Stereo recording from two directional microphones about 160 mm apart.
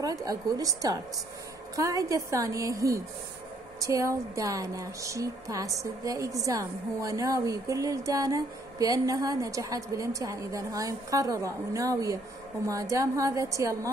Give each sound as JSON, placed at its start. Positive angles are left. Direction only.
{"t": 0.0, "sound": "a woman's voice", "side_deg": -20}